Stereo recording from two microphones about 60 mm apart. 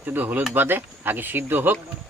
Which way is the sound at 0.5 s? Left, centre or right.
Right.